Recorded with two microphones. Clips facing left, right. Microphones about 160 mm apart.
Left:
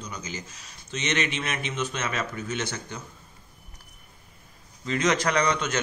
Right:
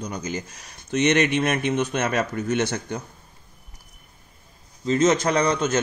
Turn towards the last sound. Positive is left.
turn(degrees=-25)  # may be behind; listen again after turning